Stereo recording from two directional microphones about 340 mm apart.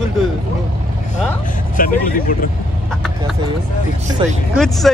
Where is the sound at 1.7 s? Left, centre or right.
Left.